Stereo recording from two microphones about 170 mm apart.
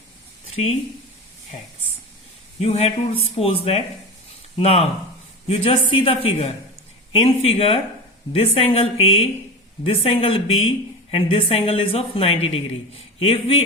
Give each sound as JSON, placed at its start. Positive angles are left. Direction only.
{"t": 0.5, "sound": "speech", "side_deg": 35}
{"t": 2.6, "sound": "speech", "side_deg": 35}